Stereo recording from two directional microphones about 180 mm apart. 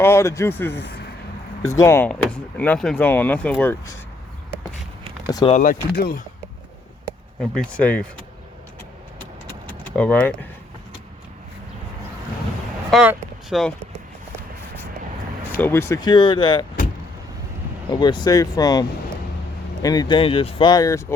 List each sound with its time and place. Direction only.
0.0 s speech: 15° left (ahead or behind)
0.8 s speech: 70° left (ahead or behind)
1.6 s speech: 15° left (ahead or behind)
2.0 s speech: 5° left (ahead or behind)
5.2 s speech: 20° left (ahead or behind)
5.5 s speech: 45° left (ahead or behind)
6.0 s speech: 55° left (ahead or behind)
7.5 s speech: 5° left (ahead or behind)
9.6 s keys jangling: 10° left (ahead or behind)
12.9 s speech: 5° right (ahead or behind)
15.5 s speech: 10° left (ahead or behind)
18.0 s speech: 25° left (ahead or behind)